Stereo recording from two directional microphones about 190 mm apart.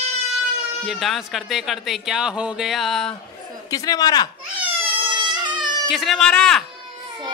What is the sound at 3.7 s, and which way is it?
Speech, 20° left (ahead or behind).